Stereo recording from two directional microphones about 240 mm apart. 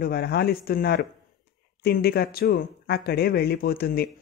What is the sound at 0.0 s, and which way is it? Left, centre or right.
Speech, left.